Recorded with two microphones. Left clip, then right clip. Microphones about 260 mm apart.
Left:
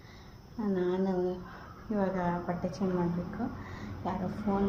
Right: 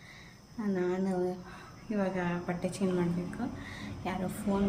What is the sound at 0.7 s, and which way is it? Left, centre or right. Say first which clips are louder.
Speech: left 1 dB; right.